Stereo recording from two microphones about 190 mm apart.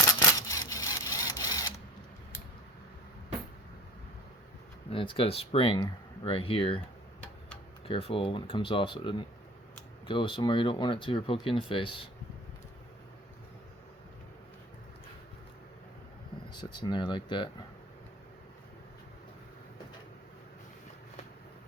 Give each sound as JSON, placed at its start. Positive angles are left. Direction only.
{"t": 0.3, "sound": "camera", "side_deg": 15}
{"t": 4.9, "sound": "speech", "side_deg": 30}
{"t": 7.9, "sound": "speech", "side_deg": 30}
{"t": 16.7, "sound": "speech", "side_deg": 25}